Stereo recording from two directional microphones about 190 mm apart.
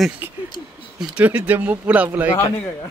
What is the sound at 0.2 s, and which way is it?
Speech, 10° right (ahead or behind).